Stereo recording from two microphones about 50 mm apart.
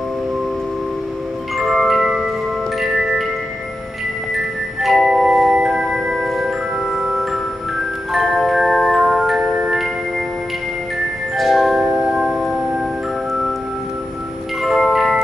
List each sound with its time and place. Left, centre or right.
1.6 s music: centre
2.0 s music: centre
2.8 s music: centre
4.8 s organ: centre
5.5 s music: centre
11.3 s music: centre
12.1 s music: right
14.8 s music: centre